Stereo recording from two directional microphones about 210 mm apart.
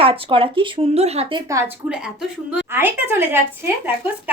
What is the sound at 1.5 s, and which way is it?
A woman's voice, 10° right (ahead or behind).